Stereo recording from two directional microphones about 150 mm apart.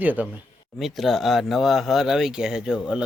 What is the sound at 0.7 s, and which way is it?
Speech, centre (ahead or behind).